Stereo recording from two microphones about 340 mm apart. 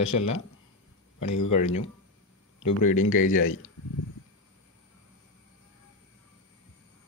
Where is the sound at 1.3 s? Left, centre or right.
Left.